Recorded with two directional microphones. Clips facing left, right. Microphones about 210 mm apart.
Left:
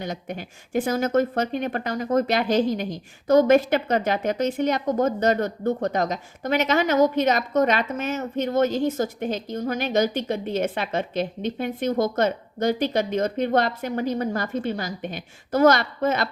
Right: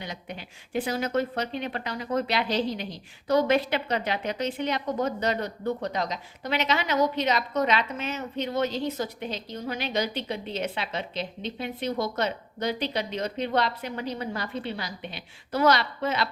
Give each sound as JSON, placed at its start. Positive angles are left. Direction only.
{"t": 0.0, "sound": "speech", "side_deg": 45}